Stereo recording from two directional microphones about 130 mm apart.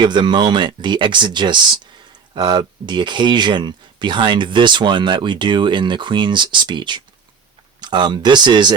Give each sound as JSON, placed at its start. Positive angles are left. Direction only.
{"t": 0.0, "sound": "speech", "side_deg": -35}